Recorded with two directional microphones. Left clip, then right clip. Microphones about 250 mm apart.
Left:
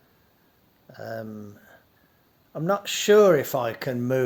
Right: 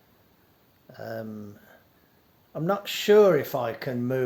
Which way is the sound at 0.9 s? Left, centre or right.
Centre.